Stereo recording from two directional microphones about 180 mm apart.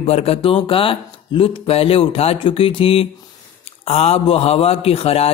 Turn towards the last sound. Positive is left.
turn(degrees=35)  # may be behind; listen again after turning